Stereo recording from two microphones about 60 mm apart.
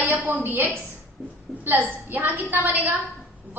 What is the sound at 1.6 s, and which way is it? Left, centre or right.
A woman's voice, right.